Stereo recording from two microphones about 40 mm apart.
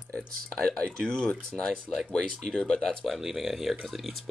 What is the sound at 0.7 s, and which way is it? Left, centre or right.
Speech, left.